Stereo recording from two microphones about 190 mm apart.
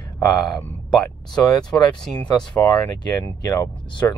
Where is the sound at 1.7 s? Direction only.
10° left (ahead or behind).